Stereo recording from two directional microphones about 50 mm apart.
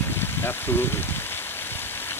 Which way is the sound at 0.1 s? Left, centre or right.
Left.